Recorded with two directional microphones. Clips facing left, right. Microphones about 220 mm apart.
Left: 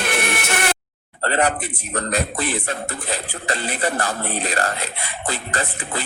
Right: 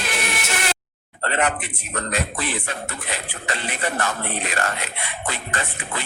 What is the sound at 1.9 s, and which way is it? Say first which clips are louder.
Speech: left 3 dB; 35° left (ahead or behind).